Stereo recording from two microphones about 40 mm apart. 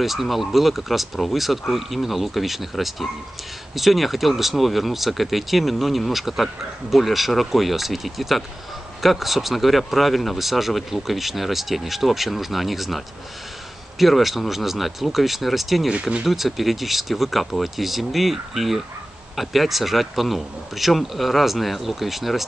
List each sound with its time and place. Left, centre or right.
0.0 s speech: centre
15.9 s speech: right
16.3 s speech: centre